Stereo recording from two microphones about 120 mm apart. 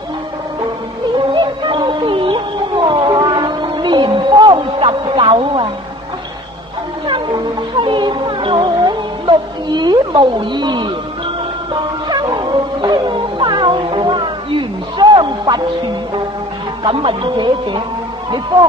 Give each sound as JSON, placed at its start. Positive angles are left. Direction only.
{"t": 1.3, "sound": "music", "side_deg": -40}
{"t": 7.1, "sound": "music", "side_deg": -40}
{"t": 9.7, "sound": "speech", "side_deg": -40}
{"t": 11.7, "sound": "music", "side_deg": -40}
{"t": 16.8, "sound": "speech", "side_deg": -45}